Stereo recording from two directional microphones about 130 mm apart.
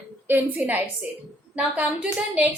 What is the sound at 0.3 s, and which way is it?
A woman's voice, 15° right (ahead or behind).